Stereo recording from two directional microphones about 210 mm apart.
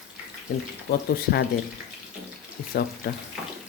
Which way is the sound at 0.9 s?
50° left (ahead or behind).